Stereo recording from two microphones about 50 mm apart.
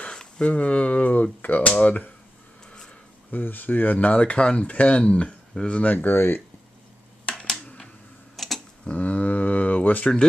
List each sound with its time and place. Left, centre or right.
0.0 s a sound: centre
0.5 s speech: left
3.3 s speech: left
4.1 s speech: left
5.9 s speech: left
8.4 s tick-tock: centre
8.8 s a sound: left